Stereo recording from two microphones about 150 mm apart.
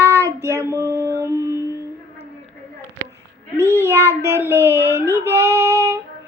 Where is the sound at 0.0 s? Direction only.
15° right (ahead or behind).